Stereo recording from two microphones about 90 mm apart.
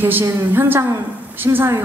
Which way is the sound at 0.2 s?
30° right (ahead or behind).